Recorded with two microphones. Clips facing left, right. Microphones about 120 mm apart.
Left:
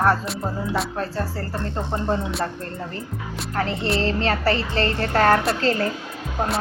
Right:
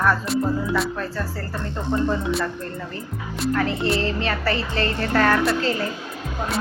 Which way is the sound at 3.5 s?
30° left (ahead or behind).